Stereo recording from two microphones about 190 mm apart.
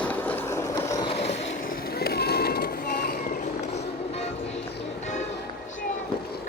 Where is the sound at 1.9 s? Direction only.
55° left (ahead or behind).